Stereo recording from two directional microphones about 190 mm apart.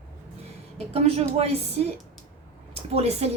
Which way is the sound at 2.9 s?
35° right (ahead or behind).